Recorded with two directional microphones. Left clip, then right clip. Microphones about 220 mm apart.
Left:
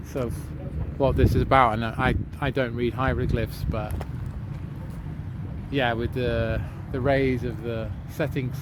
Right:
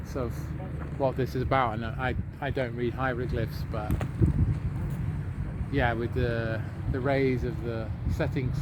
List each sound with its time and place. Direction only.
0.9 s speech: 55° left (ahead or behind)
5.7 s speech: 50° left (ahead or behind)